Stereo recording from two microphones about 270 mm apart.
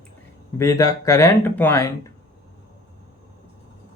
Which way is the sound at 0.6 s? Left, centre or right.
Centre.